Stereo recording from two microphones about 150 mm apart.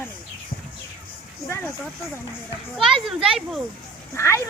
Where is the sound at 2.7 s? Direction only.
Centre (ahead or behind).